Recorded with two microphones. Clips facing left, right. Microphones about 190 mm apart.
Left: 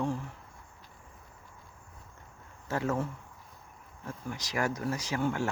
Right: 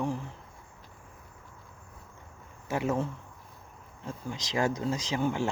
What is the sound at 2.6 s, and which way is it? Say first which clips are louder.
Speech: right 2 dB; 20° right (ahead or behind).